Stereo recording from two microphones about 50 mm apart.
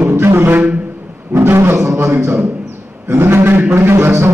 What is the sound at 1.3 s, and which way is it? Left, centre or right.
Speech, right.